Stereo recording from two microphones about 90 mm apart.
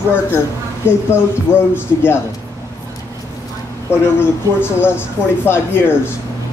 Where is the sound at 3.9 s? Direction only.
25° left (ahead or behind).